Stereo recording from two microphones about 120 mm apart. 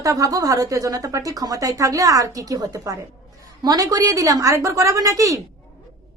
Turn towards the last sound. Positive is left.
turn(degrees=-30)  # may be behind; listen again after turning